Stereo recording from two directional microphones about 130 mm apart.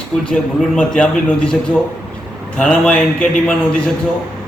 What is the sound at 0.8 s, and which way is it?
Speech, 10° left (ahead or behind).